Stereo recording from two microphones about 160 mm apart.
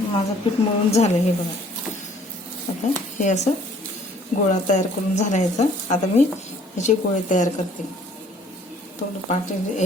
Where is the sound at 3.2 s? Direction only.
50° left (ahead or behind).